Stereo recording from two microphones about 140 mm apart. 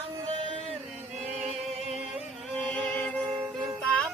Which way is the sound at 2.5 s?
5° left (ahead or behind).